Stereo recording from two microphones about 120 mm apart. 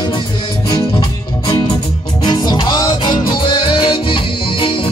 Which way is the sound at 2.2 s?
35° left (ahead or behind).